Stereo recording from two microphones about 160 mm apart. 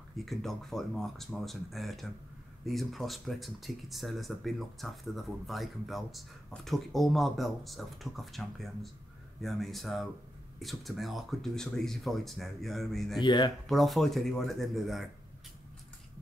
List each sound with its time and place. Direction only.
0.2 s speech: centre (ahead or behind)
13.2 s speech: 30° left (ahead or behind)
13.7 s speech: centre (ahead or behind)